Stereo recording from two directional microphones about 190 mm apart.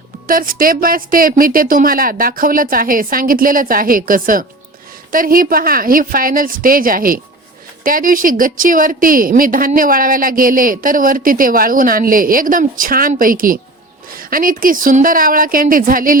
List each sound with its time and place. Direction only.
0.3 s a woman's voice: 45° right (ahead or behind)